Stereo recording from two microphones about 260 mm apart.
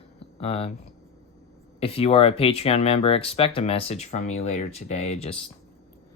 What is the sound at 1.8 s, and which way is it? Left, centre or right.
Speech, left.